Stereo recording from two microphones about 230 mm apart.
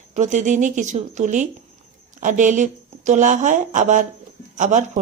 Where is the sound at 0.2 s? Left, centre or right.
Right.